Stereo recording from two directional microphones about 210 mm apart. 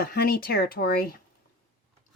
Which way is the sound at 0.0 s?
45° left (ahead or behind).